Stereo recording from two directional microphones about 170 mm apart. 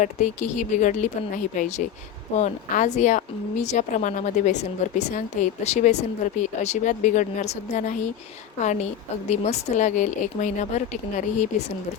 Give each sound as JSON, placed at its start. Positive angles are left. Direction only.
{"t": 0.0, "sound": "a woman's voice", "side_deg": 45}